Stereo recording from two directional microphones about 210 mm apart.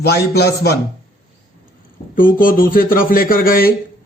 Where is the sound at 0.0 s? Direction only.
50° left (ahead or behind).